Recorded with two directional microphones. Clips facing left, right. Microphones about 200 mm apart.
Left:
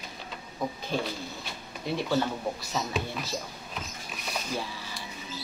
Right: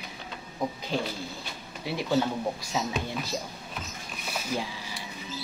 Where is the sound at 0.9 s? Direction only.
15° right (ahead or behind).